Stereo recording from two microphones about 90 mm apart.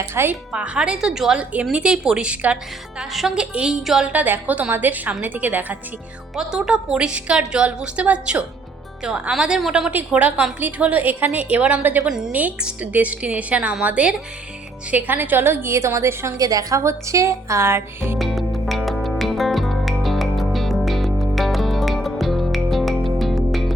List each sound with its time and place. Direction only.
0.1 s a woman's voice: 25° right (ahead or behind)
0.5 s a woman's voice: 15° right (ahead or behind)
3.0 s a woman's voice: 5° right (ahead or behind)
4.1 s a woman's voice: 20° right (ahead or behind)
6.3 s a woman's voice: 5° right (ahead or behind)
9.9 s a woman's voice: 20° right (ahead or behind)
12.0 s a woman's voice: 5° right (ahead or behind)
12.3 s a woman's voice: 15° right (ahead or behind)
18.2 s music: centre (ahead or behind)